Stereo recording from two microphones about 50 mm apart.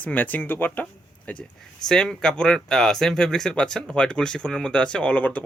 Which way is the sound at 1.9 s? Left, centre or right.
Centre.